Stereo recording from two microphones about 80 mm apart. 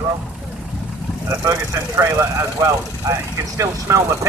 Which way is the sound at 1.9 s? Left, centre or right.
Right.